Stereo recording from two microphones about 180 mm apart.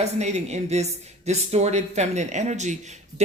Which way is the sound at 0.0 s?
40° right (ahead or behind).